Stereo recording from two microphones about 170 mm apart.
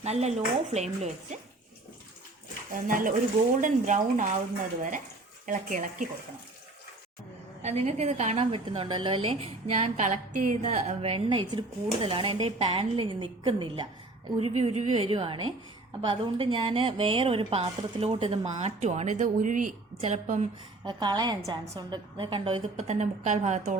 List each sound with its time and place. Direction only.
0.0 s a woman's voice: 40° right (ahead or behind)
2.7 s speech: 55° right (ahead or behind)
7.6 s a woman's voice: 40° right (ahead or behind)
20.0 s a woman's voice: 40° right (ahead or behind)
20.8 s a woman's voice: 25° right (ahead or behind); by 23.7 s 45° right (ahead or behind)